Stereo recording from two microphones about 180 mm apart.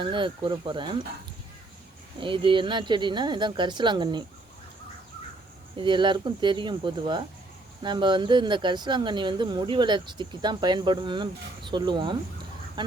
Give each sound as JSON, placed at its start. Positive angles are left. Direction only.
{"t": 0.0, "sound": "speech", "side_deg": -25}
{"t": 2.2, "sound": "speech", "side_deg": -30}
{"t": 5.7, "sound": "speech", "side_deg": -25}